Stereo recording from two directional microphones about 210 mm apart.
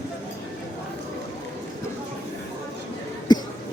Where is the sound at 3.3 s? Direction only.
20° left (ahead or behind).